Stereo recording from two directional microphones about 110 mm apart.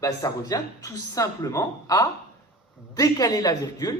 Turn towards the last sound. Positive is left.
turn(degrees=35)  # may be behind; listen again after turning